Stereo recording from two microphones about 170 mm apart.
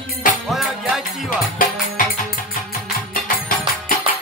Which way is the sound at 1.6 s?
55° left (ahead or behind).